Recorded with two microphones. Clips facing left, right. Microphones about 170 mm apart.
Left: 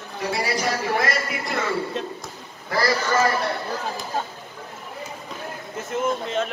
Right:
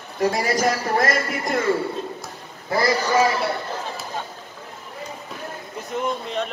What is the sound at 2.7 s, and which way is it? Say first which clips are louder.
Speech: right 2 dB; 20° right (ahead or behind).